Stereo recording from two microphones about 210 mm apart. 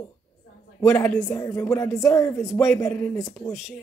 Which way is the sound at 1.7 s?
15° left (ahead or behind).